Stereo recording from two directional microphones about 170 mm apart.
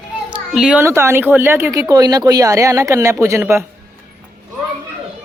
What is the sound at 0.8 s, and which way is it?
Speech, 15° right (ahead or behind).